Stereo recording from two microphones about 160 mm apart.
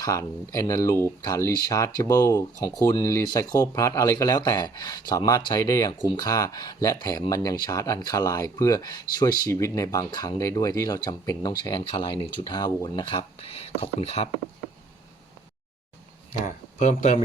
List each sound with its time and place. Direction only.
0.0 s speech: 20° left (ahead or behind); by 14.3 s 40° left (ahead or behind)
16.5 s speech: 50° left (ahead or behind)